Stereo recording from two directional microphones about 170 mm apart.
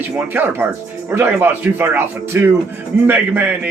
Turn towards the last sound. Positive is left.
turn(degrees=-10)  # may be behind; listen again after turning